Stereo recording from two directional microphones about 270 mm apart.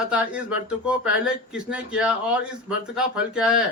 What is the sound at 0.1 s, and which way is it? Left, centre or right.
Speech, centre.